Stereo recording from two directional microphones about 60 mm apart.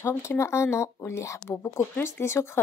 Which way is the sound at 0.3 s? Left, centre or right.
Left.